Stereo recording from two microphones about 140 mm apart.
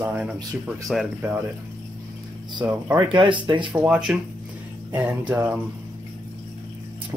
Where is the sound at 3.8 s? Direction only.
5° right (ahead or behind).